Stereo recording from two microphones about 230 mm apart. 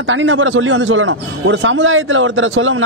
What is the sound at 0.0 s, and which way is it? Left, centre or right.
A man's voice, right.